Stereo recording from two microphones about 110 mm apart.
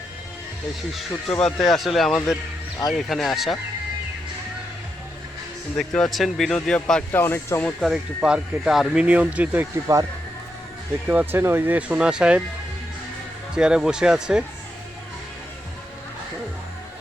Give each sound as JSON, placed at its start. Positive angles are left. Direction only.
{"t": 0.9, "sound": "speech", "side_deg": 5}
{"t": 5.7, "sound": "speech", "side_deg": 5}
{"t": 7.1, "sound": "speech", "side_deg": 20}
{"t": 7.6, "sound": "speech", "side_deg": 0}
{"t": 11.1, "sound": "speech", "side_deg": -15}
{"t": 13.5, "sound": "speech", "side_deg": -5}